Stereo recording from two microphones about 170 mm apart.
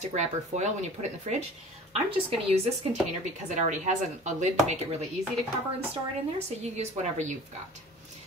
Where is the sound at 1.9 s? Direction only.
35° right (ahead or behind).